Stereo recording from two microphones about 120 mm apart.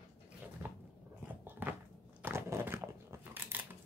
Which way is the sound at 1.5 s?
15° right (ahead or behind).